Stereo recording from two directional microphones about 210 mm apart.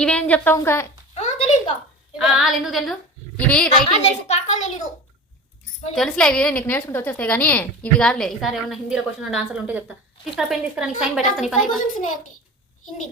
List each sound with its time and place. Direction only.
0.0 s a woman's voice: 5° left (ahead or behind)
1.1 s a sound: 30° left (ahead or behind)
2.1 s a woman's voice: centre (ahead or behind)
3.7 s a woman's voice: 25° left (ahead or behind)
5.9 s a woman's voice: centre (ahead or behind)